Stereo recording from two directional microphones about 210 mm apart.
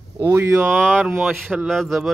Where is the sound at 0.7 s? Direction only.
5° left (ahead or behind).